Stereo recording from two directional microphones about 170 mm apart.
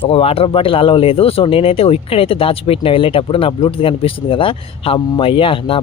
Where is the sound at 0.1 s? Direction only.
35° left (ahead or behind).